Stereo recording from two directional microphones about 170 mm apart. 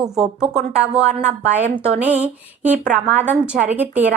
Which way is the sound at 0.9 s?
40° right (ahead or behind).